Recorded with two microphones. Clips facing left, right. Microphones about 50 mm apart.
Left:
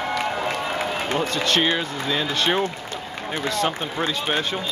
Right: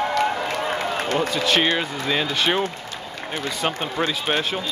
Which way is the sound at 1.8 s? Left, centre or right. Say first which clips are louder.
Right 1 dB; centre.